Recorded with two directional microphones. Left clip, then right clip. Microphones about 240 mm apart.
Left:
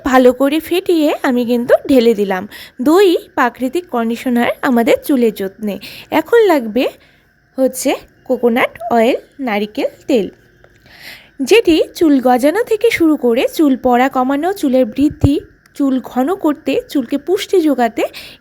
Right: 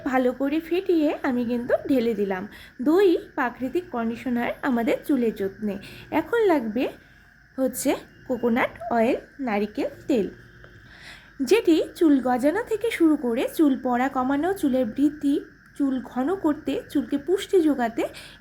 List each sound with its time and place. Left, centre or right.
0.0 s a woman's voice: left
7.5 s a woman's voice: left